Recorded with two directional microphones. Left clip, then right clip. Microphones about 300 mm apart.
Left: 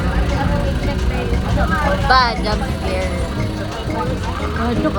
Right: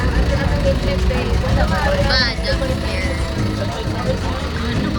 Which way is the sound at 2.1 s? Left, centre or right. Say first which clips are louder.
Left 4 dB; centre.